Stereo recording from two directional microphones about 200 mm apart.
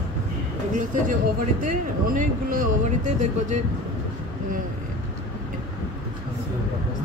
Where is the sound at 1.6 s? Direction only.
45° right (ahead or behind).